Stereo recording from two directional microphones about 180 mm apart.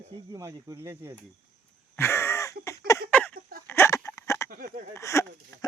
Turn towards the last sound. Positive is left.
turn(degrees=15)  # may be behind; listen again after turning